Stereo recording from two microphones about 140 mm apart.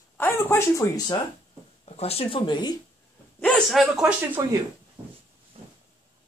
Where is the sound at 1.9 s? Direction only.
45° left (ahead or behind).